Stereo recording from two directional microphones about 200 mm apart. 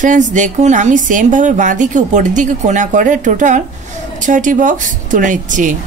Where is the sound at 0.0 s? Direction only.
40° right (ahead or behind).